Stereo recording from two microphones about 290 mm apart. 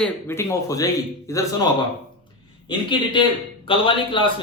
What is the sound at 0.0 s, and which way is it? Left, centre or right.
Speech, centre.